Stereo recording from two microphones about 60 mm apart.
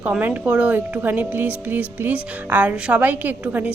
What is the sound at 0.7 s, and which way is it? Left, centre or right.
Speech, right.